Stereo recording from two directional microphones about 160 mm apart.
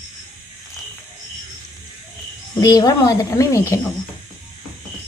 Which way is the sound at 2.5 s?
25° left (ahead or behind).